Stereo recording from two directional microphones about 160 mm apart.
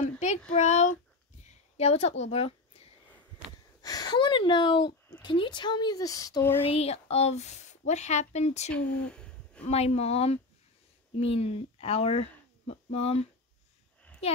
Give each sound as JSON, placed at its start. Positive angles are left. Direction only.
{"t": 0.6, "sound": "a woman's voice", "side_deg": 45}
{"t": 3.8, "sound": "speech", "side_deg": 25}
{"t": 6.6, "sound": "speech", "side_deg": 40}
{"t": 8.7, "sound": "a sound", "side_deg": 5}
{"t": 9.7, "sound": "a woman's voice", "side_deg": 40}